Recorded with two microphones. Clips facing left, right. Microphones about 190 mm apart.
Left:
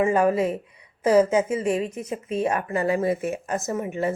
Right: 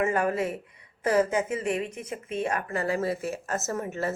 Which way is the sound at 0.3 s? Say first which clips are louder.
Left 6 dB; 25° left (ahead or behind).